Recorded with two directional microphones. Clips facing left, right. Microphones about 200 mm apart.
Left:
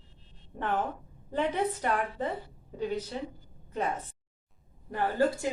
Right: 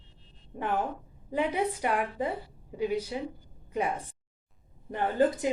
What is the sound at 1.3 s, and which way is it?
A woman's voice, 10° right (ahead or behind).